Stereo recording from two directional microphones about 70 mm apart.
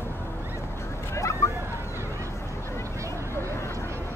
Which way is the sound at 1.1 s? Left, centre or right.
Left.